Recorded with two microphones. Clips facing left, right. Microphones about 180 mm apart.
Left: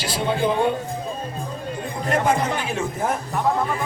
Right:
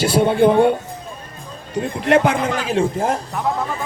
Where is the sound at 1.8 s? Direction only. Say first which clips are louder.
Right 8 dB; 80° right.